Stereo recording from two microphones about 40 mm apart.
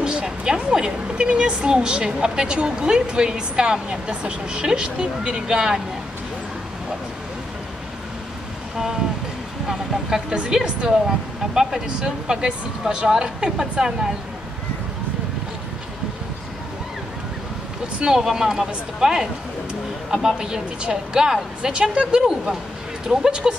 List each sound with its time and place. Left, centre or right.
0.0 s a sound: right
0.6 s a woman's voice: right
9.7 s speech: centre
17.9 s speech: centre
20.2 s a woman's voice: centre